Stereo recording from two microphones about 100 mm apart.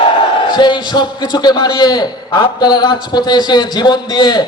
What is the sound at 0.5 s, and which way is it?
A man's voice, 50° left (ahead or behind).